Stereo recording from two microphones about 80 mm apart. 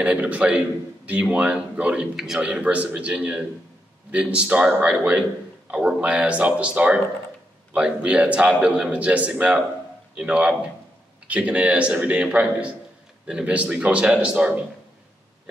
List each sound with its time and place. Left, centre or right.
0.0 s a man's voice: centre
2.1 s a man's voice: centre